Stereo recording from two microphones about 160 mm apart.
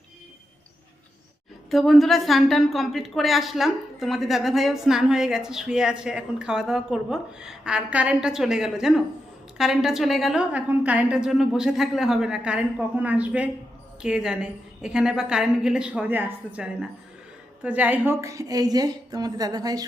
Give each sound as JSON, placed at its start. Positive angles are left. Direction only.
{"t": 1.7, "sound": "a woman's voice", "side_deg": 0}